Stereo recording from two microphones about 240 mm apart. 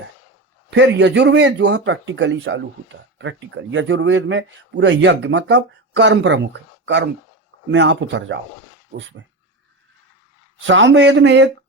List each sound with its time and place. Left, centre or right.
0.7 s speech: right
10.7 s speech: right